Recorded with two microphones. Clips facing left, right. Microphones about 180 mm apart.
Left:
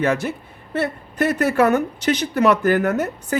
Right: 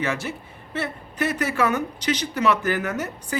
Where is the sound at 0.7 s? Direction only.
50° left (ahead or behind).